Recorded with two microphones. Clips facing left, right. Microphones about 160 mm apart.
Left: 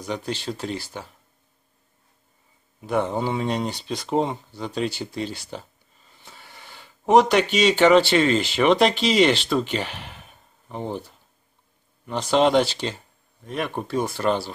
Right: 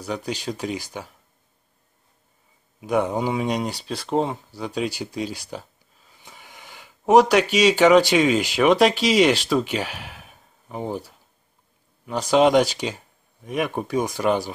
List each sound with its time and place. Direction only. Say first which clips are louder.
0.0 s speech: right 1 dB; 10° right (ahead or behind)
2.8 s speech: right 2 dB; 10° right (ahead or behind)